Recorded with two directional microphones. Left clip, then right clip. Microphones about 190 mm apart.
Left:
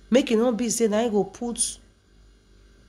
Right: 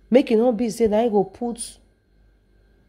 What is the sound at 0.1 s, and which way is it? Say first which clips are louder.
Speech: right 4 dB; 25° right (ahead or behind).